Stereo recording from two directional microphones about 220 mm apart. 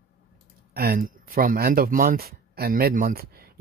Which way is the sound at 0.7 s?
45° right (ahead or behind).